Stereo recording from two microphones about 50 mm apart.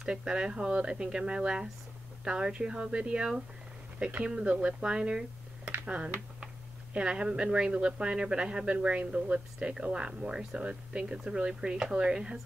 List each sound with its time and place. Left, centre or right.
0.0 s speech: centre